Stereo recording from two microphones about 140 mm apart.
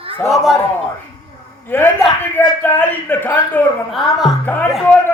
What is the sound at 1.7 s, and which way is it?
A man's voice, 15° left (ahead or behind).